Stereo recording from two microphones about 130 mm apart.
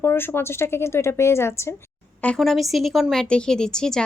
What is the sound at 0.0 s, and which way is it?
A woman's voice, 15° left (ahead or behind).